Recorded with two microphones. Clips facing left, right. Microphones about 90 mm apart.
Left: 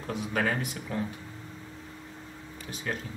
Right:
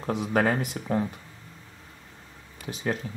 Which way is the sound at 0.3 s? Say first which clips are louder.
Right 5 dB; 35° right (ahead or behind).